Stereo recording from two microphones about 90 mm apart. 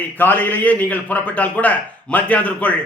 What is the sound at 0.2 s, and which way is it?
A man's voice, 20° left (ahead or behind).